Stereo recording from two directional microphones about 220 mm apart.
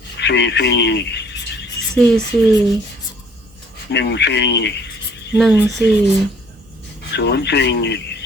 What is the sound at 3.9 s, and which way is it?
Speech, 50° left (ahead or behind).